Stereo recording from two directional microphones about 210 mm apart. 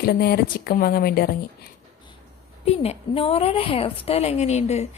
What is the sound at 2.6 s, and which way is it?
A woman's voice, 30° left (ahead or behind).